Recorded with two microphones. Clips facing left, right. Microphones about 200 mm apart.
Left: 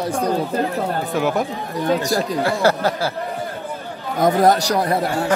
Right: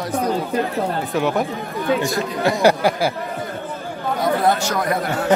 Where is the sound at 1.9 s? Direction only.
40° left (ahead or behind).